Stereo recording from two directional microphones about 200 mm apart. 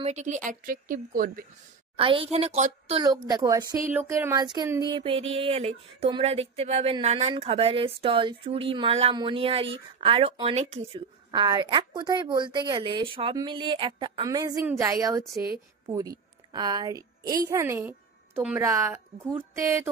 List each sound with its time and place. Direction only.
0.0 s speech: 35° right (ahead or behind)
2.0 s speech: 25° right (ahead or behind)
3.0 s a woman's voice: 20° right (ahead or behind)